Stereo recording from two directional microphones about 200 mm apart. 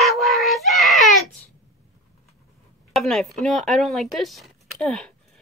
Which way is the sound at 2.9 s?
Centre (ahead or behind).